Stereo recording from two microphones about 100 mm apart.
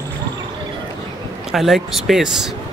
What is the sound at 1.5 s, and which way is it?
Speech, 5° right (ahead or behind).